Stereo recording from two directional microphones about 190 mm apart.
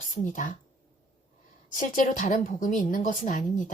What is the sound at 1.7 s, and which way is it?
A woman's voice, 40° left (ahead or behind).